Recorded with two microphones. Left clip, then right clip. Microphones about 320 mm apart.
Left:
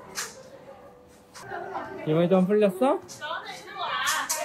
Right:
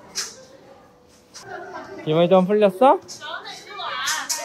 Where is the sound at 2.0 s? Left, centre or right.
Centre.